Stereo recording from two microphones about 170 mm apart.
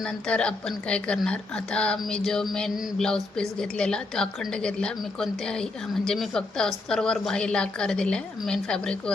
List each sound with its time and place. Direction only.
0.0 s a woman's voice: 5° left (ahead or behind)